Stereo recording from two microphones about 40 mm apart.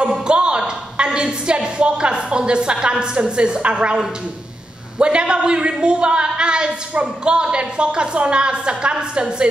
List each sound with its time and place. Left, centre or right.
0.0 s a woman's voice: right